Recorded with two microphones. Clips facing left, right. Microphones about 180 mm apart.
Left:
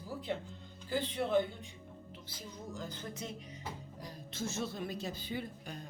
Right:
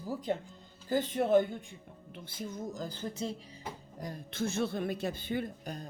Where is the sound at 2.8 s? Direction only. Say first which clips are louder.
Right 6 dB; 30° right (ahead or behind).